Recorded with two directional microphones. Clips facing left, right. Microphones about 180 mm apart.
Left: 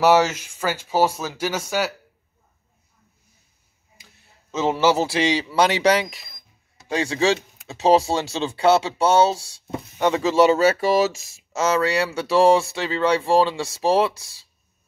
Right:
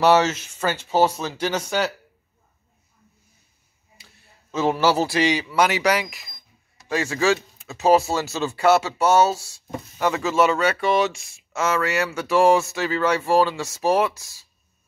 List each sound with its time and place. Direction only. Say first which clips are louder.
0.0 s speech: left 1 dB; 10° left (ahead or behind)
4.0 s speech: even; 20° left (ahead or behind)